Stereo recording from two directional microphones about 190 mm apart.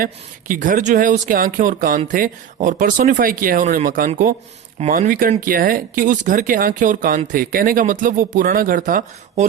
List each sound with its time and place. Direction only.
0.0 s speech: 45° right (ahead or behind)